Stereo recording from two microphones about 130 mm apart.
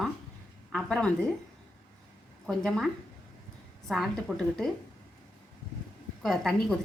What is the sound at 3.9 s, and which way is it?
Speech, centre (ahead or behind).